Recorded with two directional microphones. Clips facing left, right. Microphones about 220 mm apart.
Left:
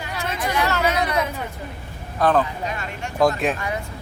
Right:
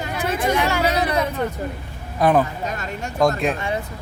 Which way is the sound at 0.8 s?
35° right (ahead or behind).